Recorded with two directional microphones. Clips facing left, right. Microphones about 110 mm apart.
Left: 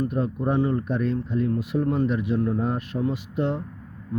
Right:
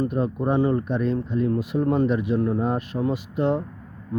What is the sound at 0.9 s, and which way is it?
Speech, centre (ahead or behind).